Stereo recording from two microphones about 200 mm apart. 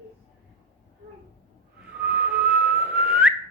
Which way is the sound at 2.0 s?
5° right (ahead or behind).